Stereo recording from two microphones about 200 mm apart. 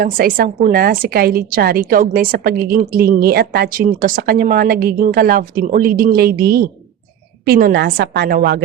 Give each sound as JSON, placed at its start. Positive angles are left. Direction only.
{"t": 0.0, "sound": "a woman's voice", "side_deg": -45}